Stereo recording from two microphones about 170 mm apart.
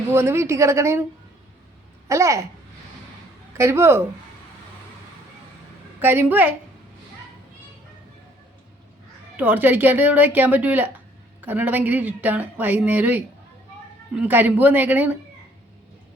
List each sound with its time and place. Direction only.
0.1 s speech: 15° right (ahead or behind)
2.0 s speech: 15° right (ahead or behind)
3.6 s speech: 15° right (ahead or behind)
6.0 s speech: 10° right (ahead or behind)
9.3 s speech: 10° right (ahead or behind)